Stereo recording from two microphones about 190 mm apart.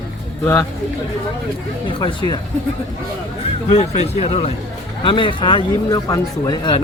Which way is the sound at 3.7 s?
30° left (ahead or behind).